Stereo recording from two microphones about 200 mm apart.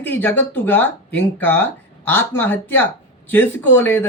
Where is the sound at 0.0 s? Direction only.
10° left (ahead or behind).